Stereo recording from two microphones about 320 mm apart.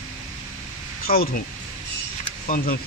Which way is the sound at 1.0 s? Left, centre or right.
Left.